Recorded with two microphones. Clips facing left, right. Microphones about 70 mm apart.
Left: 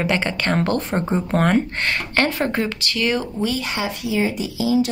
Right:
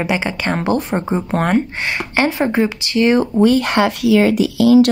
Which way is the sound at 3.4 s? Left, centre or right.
Right.